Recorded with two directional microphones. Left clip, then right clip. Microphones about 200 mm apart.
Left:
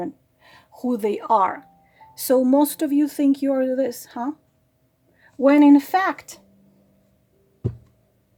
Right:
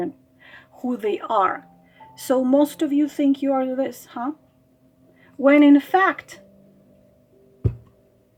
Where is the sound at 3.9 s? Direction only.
35° left (ahead or behind).